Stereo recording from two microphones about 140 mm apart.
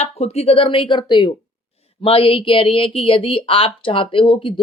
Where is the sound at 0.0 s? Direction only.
50° left (ahead or behind).